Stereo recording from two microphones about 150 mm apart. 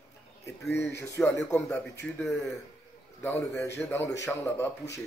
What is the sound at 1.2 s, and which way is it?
Speech, 5° left (ahead or behind).